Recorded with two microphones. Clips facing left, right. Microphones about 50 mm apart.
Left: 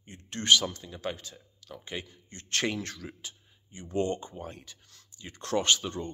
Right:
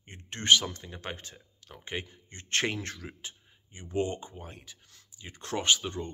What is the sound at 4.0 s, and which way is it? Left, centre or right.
Speech, centre.